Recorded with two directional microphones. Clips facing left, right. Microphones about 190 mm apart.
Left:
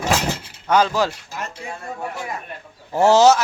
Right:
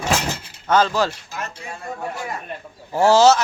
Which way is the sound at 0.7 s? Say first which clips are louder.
Even; 10° left (ahead or behind).